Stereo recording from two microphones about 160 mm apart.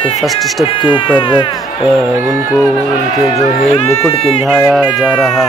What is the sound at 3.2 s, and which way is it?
Speech, 35° left (ahead or behind).